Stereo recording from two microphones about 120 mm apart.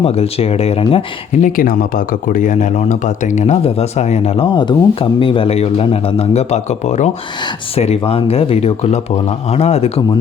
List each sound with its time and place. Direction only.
0.0 s speech: 60° left (ahead or behind)
2.3 s speech: 90° left; by 4.4 s 65° left (ahead or behind)
4.4 s speech: 40° left (ahead or behind); by 7.1 s 75° left (ahead or behind)
7.8 s speech: 60° left (ahead or behind)